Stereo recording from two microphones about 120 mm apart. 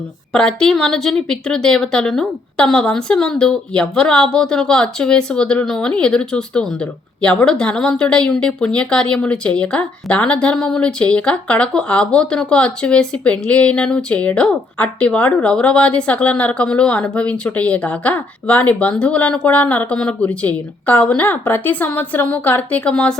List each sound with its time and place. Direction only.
0.3 s a woman's voice: 5° left (ahead or behind)